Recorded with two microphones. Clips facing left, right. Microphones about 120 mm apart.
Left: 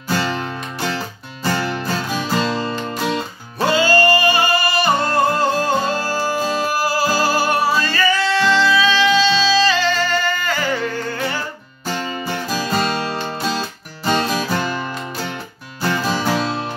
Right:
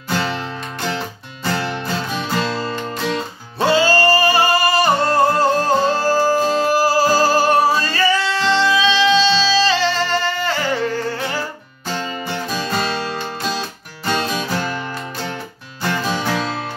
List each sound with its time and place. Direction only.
0.1 s music: centre (ahead or behind)
3.5 s music: 30° right (ahead or behind)
12.4 s music: 5° left (ahead or behind)
15.8 s music: 5° left (ahead or behind)